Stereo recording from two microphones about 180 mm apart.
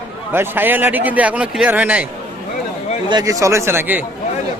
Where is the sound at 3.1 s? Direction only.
20° right (ahead or behind).